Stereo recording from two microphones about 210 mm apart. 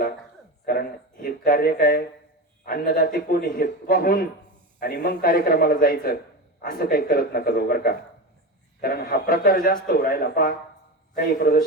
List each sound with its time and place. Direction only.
0.6 s a man's voice: 45° left (ahead or behind)